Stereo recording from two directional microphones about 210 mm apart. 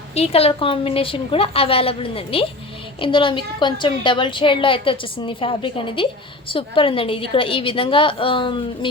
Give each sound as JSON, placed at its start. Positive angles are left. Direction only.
{"t": 0.1, "sound": "a woman's voice", "side_deg": 30}